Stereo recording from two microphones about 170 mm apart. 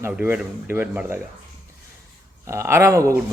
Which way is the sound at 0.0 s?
10° right (ahead or behind).